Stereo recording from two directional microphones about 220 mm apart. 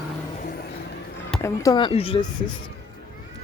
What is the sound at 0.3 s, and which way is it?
Music, 40° left (ahead or behind).